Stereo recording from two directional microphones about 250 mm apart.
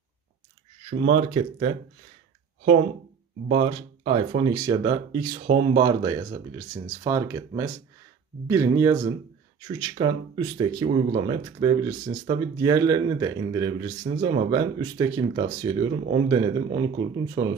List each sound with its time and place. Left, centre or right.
0.8 s speech: right
3.4 s speech: right